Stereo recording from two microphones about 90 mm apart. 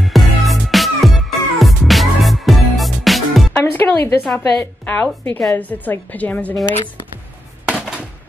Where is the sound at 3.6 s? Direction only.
20° left (ahead or behind).